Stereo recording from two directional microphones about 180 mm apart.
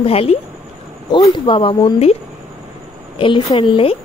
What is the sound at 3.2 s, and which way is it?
Speech, 30° left (ahead or behind).